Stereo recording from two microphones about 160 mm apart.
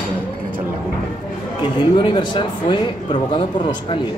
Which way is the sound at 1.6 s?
30° left (ahead or behind).